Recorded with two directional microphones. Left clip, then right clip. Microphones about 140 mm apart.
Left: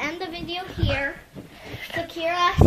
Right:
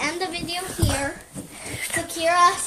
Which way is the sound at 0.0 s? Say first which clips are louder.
Right 3 dB; 25° right (ahead or behind).